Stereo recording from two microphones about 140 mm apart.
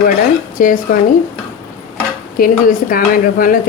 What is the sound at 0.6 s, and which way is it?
Speech, 75° left (ahead or behind).